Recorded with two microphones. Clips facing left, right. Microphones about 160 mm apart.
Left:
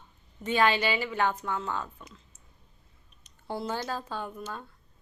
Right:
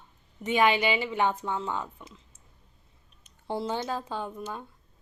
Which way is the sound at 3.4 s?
20° right (ahead or behind).